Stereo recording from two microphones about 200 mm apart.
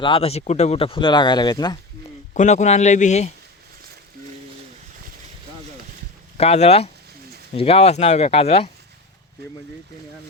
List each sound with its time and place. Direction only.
0.0 s speech: 30° left (ahead or behind)
2.3 s speech: 35° left (ahead or behind)
6.3 s speech: 30° left (ahead or behind)